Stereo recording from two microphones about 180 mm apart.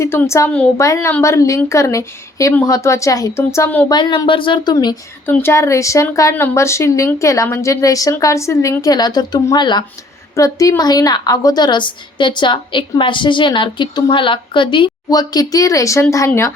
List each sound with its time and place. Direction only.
0.0 s speech: 15° left (ahead or behind)
3.8 s a woman's voice: 25° left (ahead or behind)
5.2 s a woman's voice: 10° left (ahead or behind)